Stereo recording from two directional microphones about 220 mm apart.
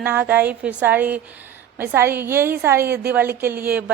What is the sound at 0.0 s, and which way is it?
A woman's voice, 10° right (ahead or behind).